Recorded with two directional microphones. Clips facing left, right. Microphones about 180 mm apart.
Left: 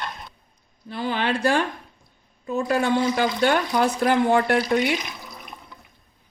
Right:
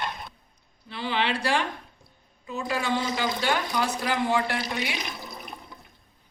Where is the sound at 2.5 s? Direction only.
50° left (ahead or behind).